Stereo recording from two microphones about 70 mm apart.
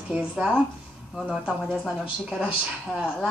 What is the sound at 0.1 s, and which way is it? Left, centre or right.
Speech, centre.